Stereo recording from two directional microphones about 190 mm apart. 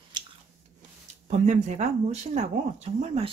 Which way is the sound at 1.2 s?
40° right (ahead or behind).